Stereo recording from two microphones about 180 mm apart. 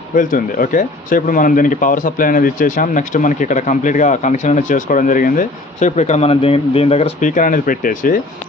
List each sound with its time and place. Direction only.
0.1 s speech: 50° left (ahead or behind)